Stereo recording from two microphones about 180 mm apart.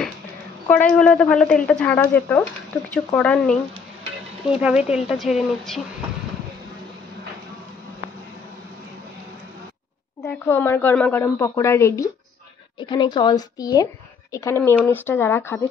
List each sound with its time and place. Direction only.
0.7 s a woman's voice: 5° left (ahead or behind)
4.5 s speech: 5° right (ahead or behind)
10.2 s a woman's voice: 15° left (ahead or behind)